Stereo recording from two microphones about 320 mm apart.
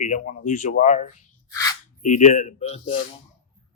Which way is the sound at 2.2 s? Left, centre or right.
Left.